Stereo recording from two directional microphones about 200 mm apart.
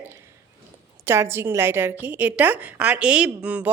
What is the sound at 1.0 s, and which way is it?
Speech, 10° right (ahead or behind).